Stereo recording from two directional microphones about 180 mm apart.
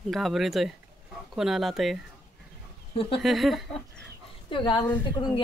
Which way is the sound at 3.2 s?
Centre (ahead or behind).